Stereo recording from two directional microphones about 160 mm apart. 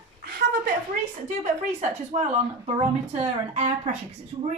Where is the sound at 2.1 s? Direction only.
45° right (ahead or behind).